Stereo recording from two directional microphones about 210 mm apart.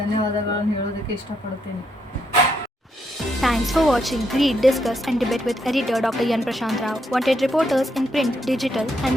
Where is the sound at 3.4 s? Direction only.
Centre (ahead or behind).